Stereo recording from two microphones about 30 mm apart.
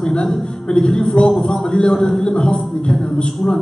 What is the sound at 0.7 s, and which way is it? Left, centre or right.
A man's voice, left.